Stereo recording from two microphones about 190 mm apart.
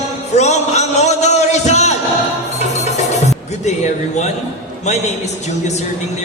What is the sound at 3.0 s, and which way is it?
Music, 35° left (ahead or behind).